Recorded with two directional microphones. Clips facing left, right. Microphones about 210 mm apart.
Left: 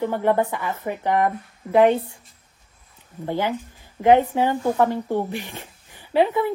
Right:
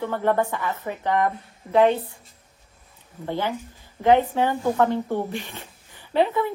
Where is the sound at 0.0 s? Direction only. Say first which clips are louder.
Left 2 dB; 15° left (ahead or behind).